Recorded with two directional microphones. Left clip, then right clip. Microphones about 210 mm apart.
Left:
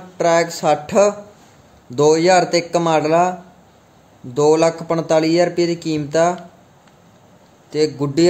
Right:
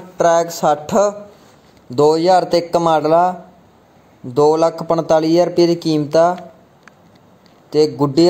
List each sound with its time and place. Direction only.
0.2 s a man's voice: 15° right (ahead or behind)
7.7 s a man's voice: 20° right (ahead or behind)